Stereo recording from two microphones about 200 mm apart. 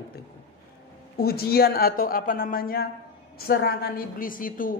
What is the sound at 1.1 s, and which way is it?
A woman's voice, 50° left (ahead or behind).